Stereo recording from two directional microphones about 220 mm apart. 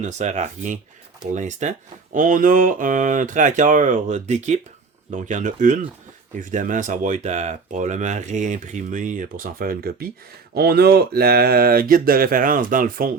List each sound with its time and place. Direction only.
0.0 s speech: 30° right (ahead or behind)